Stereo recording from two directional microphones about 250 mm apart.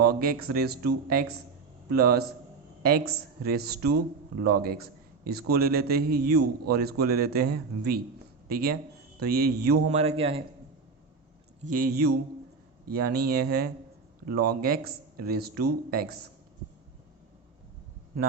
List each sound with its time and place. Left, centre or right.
0.0 s a man's voice: right
9.9 s a man's voice: right
11.6 s a man's voice: right